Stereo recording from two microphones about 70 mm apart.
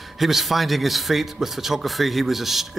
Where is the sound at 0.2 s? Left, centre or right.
Centre.